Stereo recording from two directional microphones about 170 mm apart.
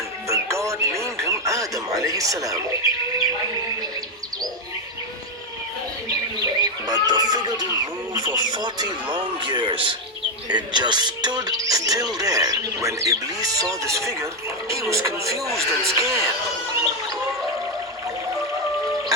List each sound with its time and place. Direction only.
0.3 s music: 15° right (ahead or behind)
6.1 s bird: 20° right (ahead or behind)
8.1 s speech: 25° right (ahead or behind)